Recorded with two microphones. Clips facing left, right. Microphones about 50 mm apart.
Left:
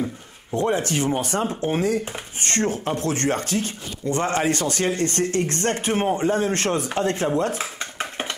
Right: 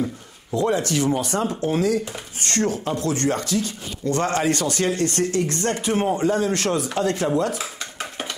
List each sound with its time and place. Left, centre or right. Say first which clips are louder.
0.6 s speech: right 1 dB; left
4.0 s speech: right 1 dB; left
7.3 s dishes: even; left